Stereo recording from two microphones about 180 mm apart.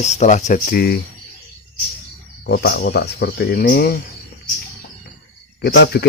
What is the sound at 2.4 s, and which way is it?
Speech, 65° left (ahead or behind).